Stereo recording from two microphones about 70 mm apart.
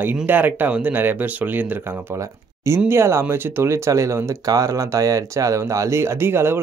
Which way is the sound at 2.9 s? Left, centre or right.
Right.